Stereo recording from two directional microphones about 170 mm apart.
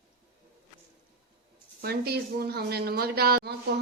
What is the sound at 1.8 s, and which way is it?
A woman's voice, 65° right (ahead or behind).